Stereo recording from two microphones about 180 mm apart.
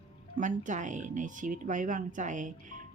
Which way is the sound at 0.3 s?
45° right (ahead or behind).